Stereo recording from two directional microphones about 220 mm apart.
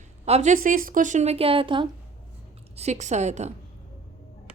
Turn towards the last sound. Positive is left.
turn(degrees=-30)  # may be behind; listen again after turning